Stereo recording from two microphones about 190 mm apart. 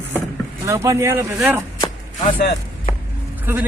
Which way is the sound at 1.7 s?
25° left (ahead or behind).